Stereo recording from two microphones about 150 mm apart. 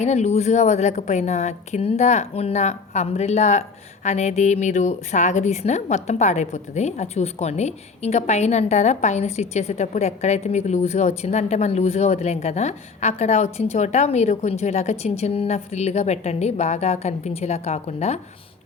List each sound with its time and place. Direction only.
0.0 s a woman's voice: 50° left (ahead or behind)